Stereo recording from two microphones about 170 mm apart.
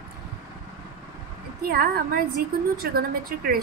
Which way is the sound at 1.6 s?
60° right (ahead or behind).